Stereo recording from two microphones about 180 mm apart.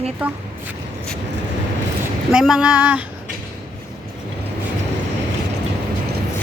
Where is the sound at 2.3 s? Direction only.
5° right (ahead or behind).